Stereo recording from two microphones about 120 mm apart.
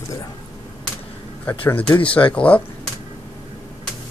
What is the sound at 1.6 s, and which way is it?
Speech, 15° left (ahead or behind).